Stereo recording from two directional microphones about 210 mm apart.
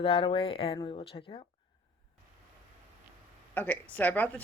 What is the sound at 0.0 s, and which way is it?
Speech, 25° left (ahead or behind).